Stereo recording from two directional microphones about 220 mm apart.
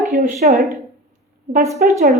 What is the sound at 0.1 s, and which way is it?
Speech, 30° right (ahead or behind).